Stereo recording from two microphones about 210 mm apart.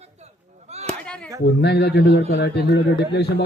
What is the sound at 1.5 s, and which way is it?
Speech, 50° left (ahead or behind).